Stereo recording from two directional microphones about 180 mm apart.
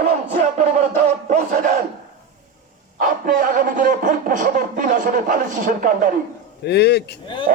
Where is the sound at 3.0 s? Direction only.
50° right (ahead or behind).